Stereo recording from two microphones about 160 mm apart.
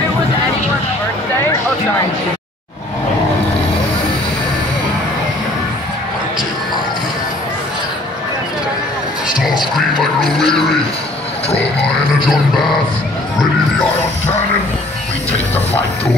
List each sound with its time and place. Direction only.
9.8 s music: centre (ahead or behind)
11.5 s a sound: 5° left (ahead or behind)
12.5 s music: centre (ahead or behind)
15.3 s music: 40° left (ahead or behind)